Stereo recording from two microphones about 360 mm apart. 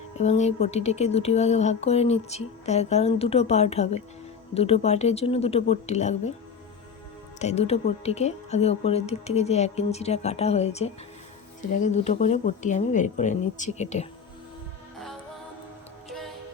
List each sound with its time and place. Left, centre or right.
0.2 s speech: centre
7.3 s speech: centre